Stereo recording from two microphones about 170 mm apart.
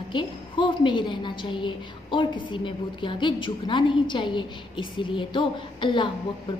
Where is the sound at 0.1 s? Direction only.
30° left (ahead or behind).